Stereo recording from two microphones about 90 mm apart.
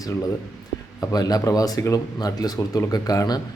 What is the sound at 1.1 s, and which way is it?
Speech, 45° left (ahead or behind).